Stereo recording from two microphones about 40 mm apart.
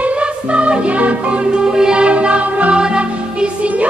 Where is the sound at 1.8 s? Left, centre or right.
Centre.